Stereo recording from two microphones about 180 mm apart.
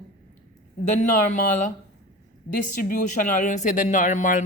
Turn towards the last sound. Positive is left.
turn(degrees=45)  # may be behind; listen again after turning